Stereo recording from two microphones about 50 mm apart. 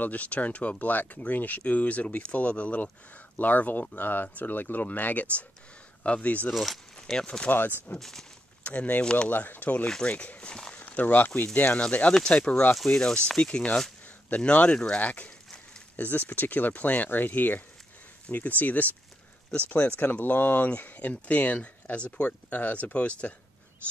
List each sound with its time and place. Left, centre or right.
0.0 s speech: left
6.5 s speech: centre
7.0 s speech: centre
8.0 s speech: centre
8.6 s speech: left
9.3 s speech: left
9.8 s speech: centre
10.1 s speech: left
10.7 s a sound: left
11.5 s speech: left
12.8 s speech: centre
14.4 s speech: left
20.0 s speech: left